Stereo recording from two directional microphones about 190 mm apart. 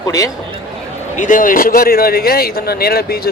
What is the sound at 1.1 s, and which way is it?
Speech, 45° left (ahead or behind).